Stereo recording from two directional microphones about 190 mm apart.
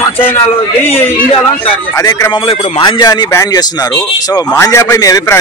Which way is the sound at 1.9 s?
15° left (ahead or behind).